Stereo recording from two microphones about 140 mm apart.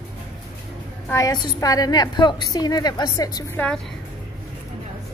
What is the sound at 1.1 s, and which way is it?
A woman's voice, 25° left (ahead or behind).